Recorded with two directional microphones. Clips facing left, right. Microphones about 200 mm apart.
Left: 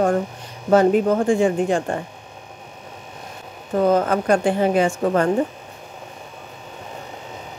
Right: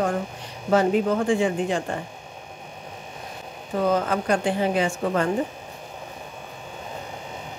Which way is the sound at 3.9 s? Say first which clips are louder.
Left 5 dB; 50° left (ahead or behind).